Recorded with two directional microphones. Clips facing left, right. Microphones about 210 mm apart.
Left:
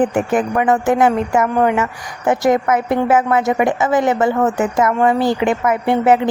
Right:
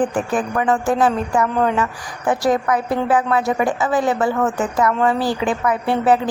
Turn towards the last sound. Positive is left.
turn(degrees=20)  # may be behind; listen again after turning